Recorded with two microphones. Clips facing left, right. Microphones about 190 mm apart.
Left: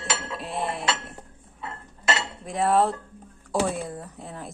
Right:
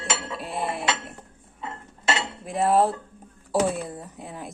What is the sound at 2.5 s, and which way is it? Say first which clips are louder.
Music: right 1 dB; centre (ahead or behind).